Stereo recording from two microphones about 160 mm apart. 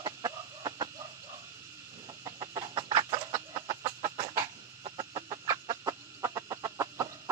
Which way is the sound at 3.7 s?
25° right (ahead or behind).